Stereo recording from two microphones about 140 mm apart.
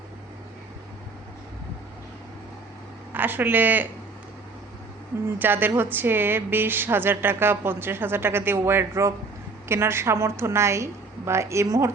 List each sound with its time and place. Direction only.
3.1 s speech: 15° right (ahead or behind)
5.4 s a woman's voice: 15° right (ahead or behind)